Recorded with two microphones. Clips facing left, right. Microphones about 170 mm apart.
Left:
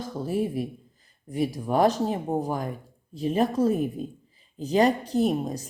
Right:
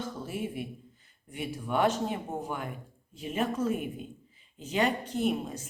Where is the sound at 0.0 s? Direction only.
40° left (ahead or behind).